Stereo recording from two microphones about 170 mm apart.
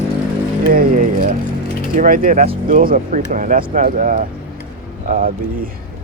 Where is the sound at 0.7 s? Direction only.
55° right (ahead or behind).